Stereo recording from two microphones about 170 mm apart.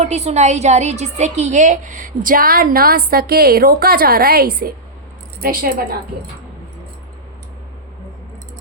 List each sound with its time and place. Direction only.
0.0 s a woman's voice: 40° right (ahead or behind); by 6.0 s 55° right (ahead or behind)